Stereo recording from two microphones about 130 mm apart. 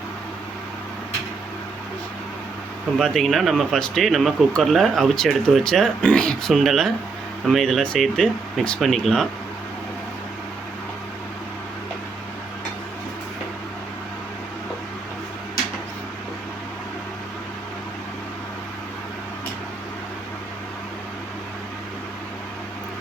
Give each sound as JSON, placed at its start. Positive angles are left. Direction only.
{"t": 3.0, "sound": "speech", "side_deg": 0}